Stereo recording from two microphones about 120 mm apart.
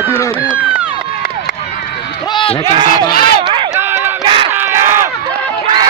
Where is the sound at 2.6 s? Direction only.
40° right (ahead or behind).